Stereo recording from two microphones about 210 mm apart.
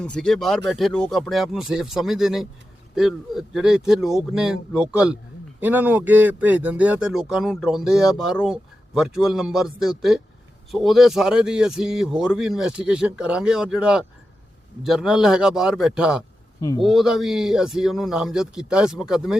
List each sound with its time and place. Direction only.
0.0 s speech: 5° left (ahead or behind)